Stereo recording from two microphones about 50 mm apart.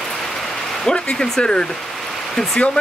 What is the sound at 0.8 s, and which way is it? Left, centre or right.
Speech, centre.